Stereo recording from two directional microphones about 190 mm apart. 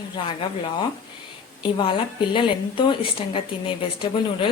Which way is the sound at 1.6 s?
25° left (ahead or behind).